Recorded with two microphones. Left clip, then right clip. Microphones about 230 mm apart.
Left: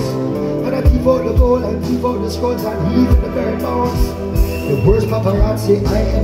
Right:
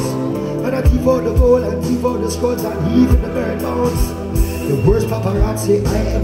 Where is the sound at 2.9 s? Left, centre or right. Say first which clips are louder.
Right 2 dB; right.